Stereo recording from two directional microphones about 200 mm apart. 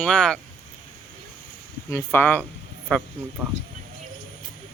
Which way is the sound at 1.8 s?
10° left (ahead or behind).